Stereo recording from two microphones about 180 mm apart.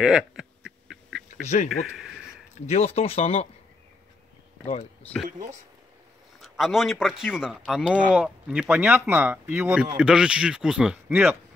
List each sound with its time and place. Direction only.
0.0 s speech: 5° right (ahead or behind)
1.3 s speech: 40° left (ahead or behind)
1.7 s speech: centre (ahead or behind)
2.5 s speech: 35° left (ahead or behind)
6.4 s speech: centre (ahead or behind)
8.1 s speech: 5° right (ahead or behind)